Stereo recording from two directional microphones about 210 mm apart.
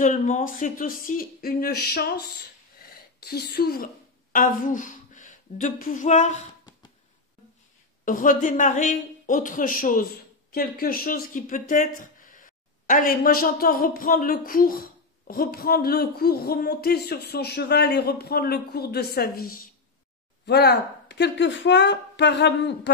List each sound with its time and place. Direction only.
0.0 s a woman's voice: 35° left (ahead or behind)
8.0 s speech: 40° left (ahead or behind); by 22.8 s 55° left (ahead or behind)